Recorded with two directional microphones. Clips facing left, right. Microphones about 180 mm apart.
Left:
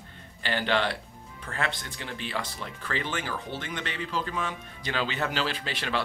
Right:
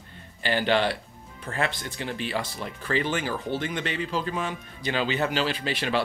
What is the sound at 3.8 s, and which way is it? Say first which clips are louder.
Speech: right 4 dB; 15° right (ahead or behind).